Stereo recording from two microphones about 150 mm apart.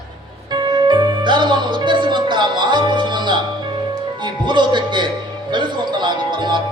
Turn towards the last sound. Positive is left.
turn(degrees=-30)  # may be behind; listen again after turning